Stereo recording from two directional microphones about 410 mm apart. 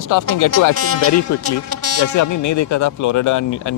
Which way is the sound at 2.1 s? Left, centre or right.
Left.